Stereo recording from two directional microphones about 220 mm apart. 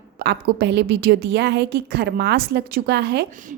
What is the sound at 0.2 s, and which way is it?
A woman's voice, 50° right (ahead or behind).